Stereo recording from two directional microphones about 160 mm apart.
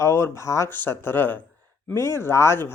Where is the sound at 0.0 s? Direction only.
20° left (ahead or behind).